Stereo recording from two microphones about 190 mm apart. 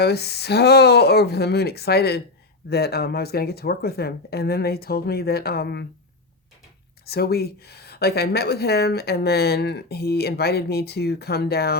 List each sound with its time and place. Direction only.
0.0 s speech: 60° left (ahead or behind)
7.0 s speech: 55° left (ahead or behind)